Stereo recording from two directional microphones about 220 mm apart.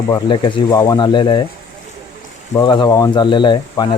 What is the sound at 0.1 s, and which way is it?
Speech, 20° left (ahead or behind).